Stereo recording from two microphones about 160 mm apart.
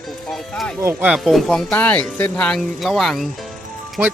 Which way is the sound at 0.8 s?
15° right (ahead or behind).